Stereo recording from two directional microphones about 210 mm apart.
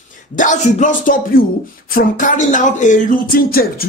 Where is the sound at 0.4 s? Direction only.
35° left (ahead or behind).